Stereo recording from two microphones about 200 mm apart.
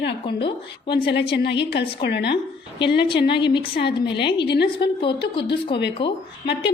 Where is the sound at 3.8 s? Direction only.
55° left (ahead or behind).